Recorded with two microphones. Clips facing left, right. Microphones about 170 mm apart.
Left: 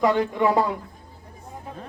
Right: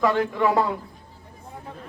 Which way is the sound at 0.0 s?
20° left (ahead or behind).